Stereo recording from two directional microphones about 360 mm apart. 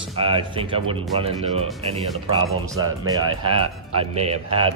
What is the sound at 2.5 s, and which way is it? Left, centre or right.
Speech, right.